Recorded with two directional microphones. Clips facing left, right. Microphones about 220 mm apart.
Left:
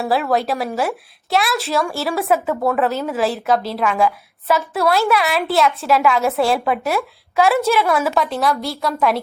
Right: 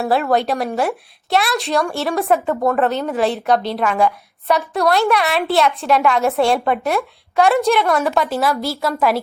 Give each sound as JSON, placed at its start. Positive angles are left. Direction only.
{"t": 0.0, "sound": "a woman's voice", "side_deg": 0}